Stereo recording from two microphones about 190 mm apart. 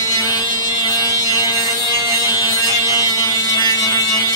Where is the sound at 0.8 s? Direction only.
20° left (ahead or behind).